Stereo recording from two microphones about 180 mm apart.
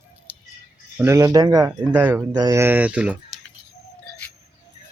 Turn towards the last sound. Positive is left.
turn(degrees=-5)  # may be behind; listen again after turning